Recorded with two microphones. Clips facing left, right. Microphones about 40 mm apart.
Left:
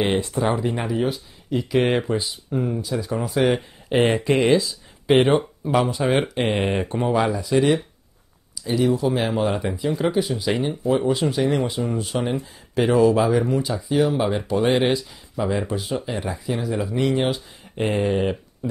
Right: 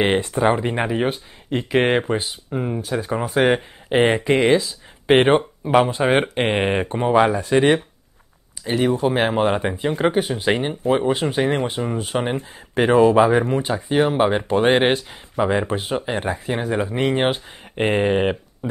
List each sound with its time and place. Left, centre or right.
0.0 s speech: right
2.5 s speech: right
2.8 s speech: right
3.9 s speech: right
4.6 s speech: right
18.6 s a sound: right